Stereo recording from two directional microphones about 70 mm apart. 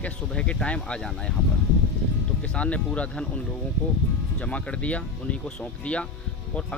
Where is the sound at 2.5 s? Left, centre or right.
Centre.